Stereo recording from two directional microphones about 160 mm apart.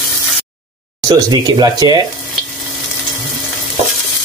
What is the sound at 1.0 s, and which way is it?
Speech, 25° right (ahead or behind).